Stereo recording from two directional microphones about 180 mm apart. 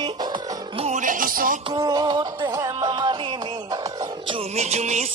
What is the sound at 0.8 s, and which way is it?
Music, 40° right (ahead or behind).